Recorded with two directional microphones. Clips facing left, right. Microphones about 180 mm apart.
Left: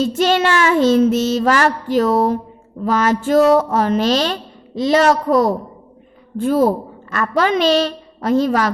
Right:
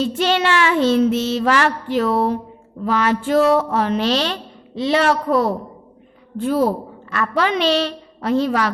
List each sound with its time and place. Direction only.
0.0 s a woman's voice: 45° left (ahead or behind)